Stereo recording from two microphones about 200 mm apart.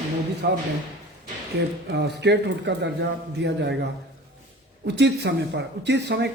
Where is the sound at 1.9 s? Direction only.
60° right (ahead or behind).